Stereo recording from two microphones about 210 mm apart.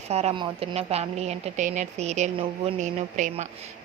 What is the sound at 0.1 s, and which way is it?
Speech, 30° right (ahead or behind).